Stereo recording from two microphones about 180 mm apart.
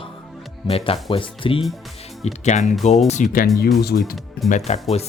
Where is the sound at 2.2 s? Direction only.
40° left (ahead or behind).